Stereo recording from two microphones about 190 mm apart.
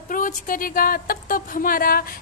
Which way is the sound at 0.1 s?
45° left (ahead or behind).